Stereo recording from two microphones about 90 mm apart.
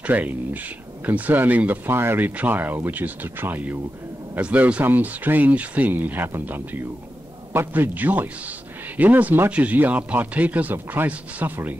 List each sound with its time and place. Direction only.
0.0 s speech: 15° right (ahead or behind)